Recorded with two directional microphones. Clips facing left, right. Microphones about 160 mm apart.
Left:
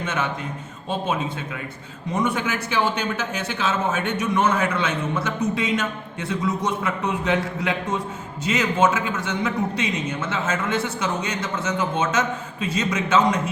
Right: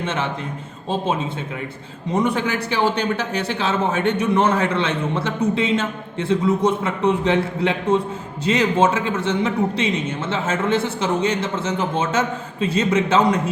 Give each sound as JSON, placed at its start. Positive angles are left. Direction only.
{"t": 0.0, "sound": "a man's voice", "side_deg": -30}
{"t": 2.1, "sound": "a man's voice", "side_deg": -35}